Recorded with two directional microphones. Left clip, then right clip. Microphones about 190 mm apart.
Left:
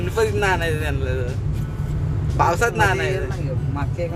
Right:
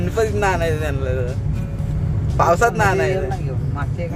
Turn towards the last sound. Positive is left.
turn(degrees=-10)  # may be behind; listen again after turning